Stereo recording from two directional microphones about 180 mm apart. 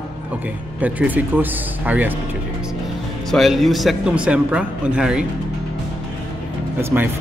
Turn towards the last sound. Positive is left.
turn(degrees=-10)  # may be behind; listen again after turning